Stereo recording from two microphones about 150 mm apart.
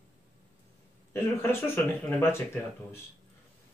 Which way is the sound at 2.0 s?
15° left (ahead or behind).